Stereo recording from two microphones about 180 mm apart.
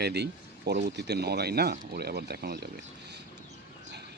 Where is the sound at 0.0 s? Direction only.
65° right (ahead or behind).